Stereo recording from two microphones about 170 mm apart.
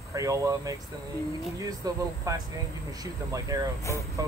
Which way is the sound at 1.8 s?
20° right (ahead or behind).